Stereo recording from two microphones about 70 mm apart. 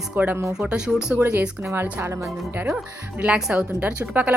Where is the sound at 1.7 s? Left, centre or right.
Right.